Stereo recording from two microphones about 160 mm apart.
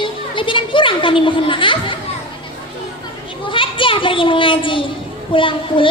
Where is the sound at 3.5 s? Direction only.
30° left (ahead or behind).